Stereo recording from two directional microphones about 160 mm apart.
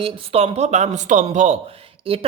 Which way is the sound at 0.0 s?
40° right (ahead or behind).